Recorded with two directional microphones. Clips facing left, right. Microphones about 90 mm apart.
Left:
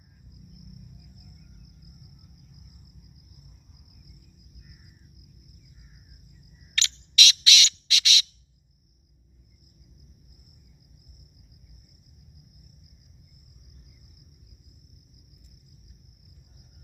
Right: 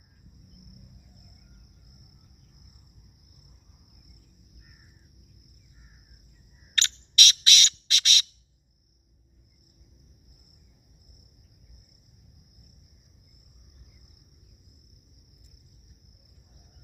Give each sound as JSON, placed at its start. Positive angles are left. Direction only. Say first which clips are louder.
{"t": 6.7, "sound": "bird", "louder": "even", "side_deg": -45}